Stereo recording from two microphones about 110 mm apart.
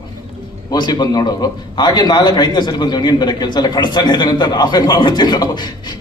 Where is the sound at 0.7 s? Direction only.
40° left (ahead or behind).